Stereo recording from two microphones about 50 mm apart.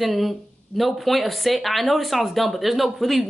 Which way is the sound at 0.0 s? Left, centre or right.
Centre.